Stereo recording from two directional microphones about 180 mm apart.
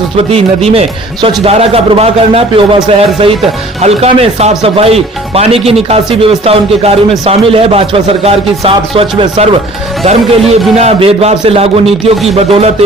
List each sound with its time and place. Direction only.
0.2 s speech: 35° right (ahead or behind)